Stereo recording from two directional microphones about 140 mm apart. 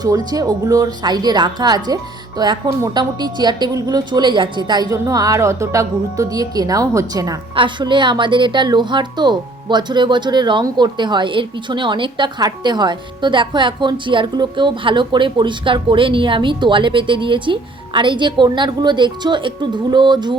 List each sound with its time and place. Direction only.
0.0 s speech: 25° right (ahead or behind)
7.5 s a woman's voice: 35° right (ahead or behind)